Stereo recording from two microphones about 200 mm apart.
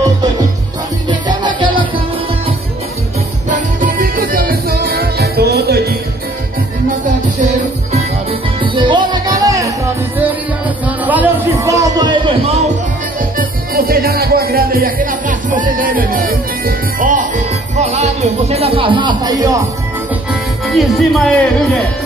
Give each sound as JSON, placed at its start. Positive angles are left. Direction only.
{"t": 1.0, "sound": "music", "side_deg": -20}
{"t": 3.4, "sound": "music", "side_deg": -40}
{"t": 7.1, "sound": "music", "side_deg": -35}
{"t": 11.1, "sound": "a sound", "side_deg": -10}
{"t": 13.4, "sound": "music", "side_deg": -50}
{"t": 20.6, "sound": "speech", "side_deg": 0}